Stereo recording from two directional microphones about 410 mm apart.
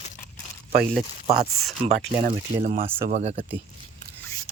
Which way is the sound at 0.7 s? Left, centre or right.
Right.